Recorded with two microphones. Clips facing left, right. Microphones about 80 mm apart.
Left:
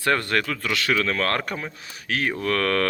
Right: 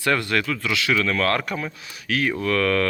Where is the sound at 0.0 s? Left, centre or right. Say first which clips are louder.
Even; left.